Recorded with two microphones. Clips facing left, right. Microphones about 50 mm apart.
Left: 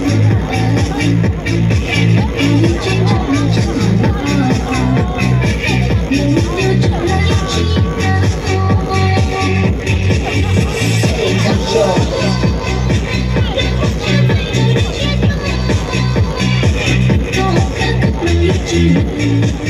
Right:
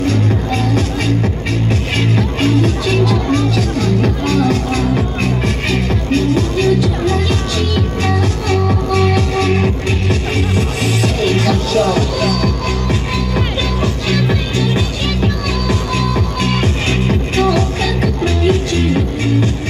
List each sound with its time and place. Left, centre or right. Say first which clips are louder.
0.7 s music: left 3 dB; left
15.7 s music: even; left